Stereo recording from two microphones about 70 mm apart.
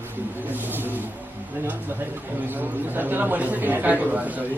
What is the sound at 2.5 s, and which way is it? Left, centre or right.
A man's voice, right.